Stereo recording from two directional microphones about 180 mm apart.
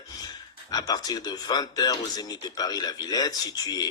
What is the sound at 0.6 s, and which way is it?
Speech, 20° left (ahead or behind).